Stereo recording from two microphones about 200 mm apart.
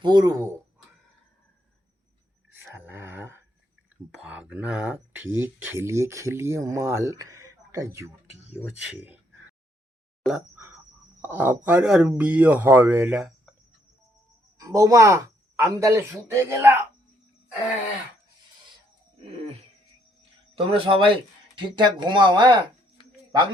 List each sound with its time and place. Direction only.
0.0 s speech: 20° right (ahead or behind)
2.6 s a sound: 10° right (ahead or behind)
4.1 s speech: 5° right (ahead or behind)
10.2 s speech: 5° right (ahead or behind)
14.6 s speech: 15° right (ahead or behind)
20.6 s speech: 25° right (ahead or behind)